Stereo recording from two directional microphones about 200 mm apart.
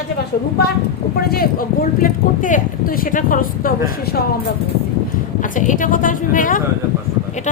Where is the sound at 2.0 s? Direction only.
40° left (ahead or behind).